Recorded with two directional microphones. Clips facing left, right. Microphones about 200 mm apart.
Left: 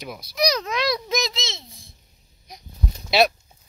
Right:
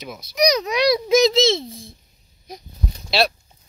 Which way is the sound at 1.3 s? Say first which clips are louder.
Right 16 dB; 30° right (ahead or behind).